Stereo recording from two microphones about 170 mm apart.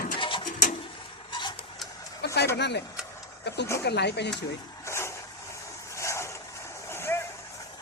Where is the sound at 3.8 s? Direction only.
80° left.